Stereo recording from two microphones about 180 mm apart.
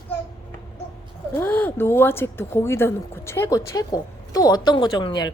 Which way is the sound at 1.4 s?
10° left (ahead or behind).